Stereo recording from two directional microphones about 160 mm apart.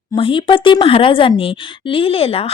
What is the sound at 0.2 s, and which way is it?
A woman's voice, 30° left (ahead or behind).